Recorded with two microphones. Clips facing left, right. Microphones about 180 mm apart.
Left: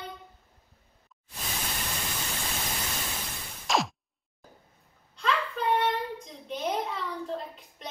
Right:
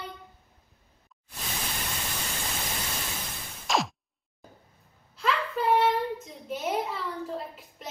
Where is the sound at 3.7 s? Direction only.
Centre (ahead or behind).